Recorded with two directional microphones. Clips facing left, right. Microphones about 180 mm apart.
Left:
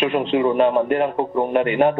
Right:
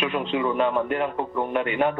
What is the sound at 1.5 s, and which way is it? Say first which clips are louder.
Speech: left 7 dB; 65° left (ahead or behind).